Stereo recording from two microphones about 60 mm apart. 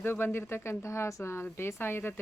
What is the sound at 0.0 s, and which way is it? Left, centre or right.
Speech, left.